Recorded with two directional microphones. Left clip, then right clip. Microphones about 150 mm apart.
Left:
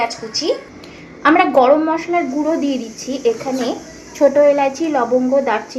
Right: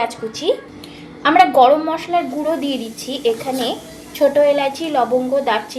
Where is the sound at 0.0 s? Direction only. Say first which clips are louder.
Left 1 dB; 10° right (ahead or behind).